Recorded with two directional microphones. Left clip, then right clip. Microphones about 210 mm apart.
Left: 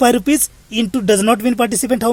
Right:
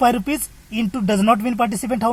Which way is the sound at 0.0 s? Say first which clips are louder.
Left 4 dB; 50° left (ahead or behind).